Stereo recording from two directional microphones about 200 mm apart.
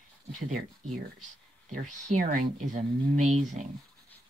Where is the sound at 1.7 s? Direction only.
40° right (ahead or behind).